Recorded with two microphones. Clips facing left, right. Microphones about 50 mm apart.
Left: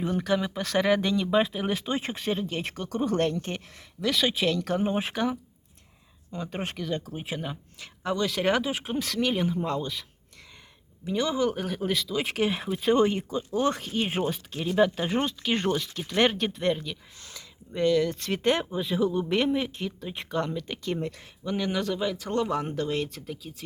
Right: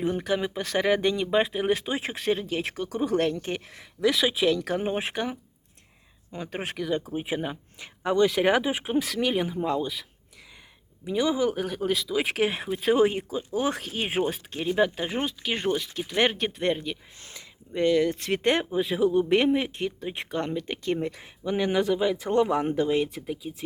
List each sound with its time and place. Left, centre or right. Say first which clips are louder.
0.0 s speech: even; centre
6.5 s speech: right 3 dB; centre
18.4 s speech: right 1 dB; centre